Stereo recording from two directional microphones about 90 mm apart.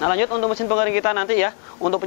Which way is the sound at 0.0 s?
15° left (ahead or behind).